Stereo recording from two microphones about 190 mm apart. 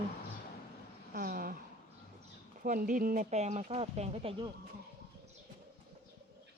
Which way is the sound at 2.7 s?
45° right (ahead or behind).